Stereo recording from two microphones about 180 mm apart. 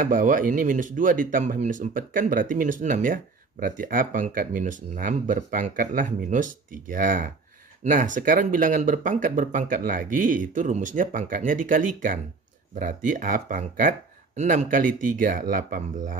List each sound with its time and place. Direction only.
0.0 s speech: 45° right (ahead or behind)